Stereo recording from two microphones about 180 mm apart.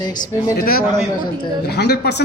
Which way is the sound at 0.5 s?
55° left (ahead or behind).